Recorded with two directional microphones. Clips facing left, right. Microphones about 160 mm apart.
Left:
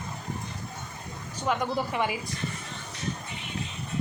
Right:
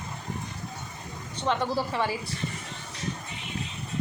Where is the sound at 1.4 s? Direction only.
10° left (ahead or behind).